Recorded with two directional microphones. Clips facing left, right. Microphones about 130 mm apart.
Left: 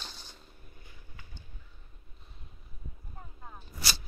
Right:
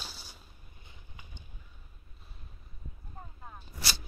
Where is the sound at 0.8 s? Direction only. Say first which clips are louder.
Even; 20° right (ahead or behind).